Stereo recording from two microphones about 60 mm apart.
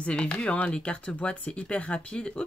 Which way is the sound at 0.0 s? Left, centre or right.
Centre.